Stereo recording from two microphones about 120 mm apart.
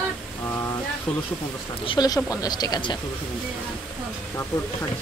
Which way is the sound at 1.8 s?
35° left (ahead or behind).